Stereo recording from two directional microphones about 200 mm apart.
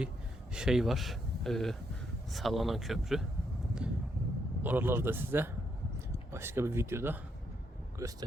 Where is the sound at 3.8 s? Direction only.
5° right (ahead or behind).